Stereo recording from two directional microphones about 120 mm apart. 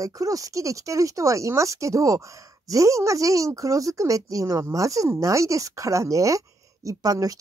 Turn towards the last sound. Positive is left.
turn(degrees=-30)  # may be behind; listen again after turning